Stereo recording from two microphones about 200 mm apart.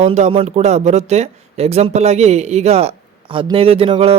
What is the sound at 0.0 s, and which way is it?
Speech, 30° right (ahead or behind).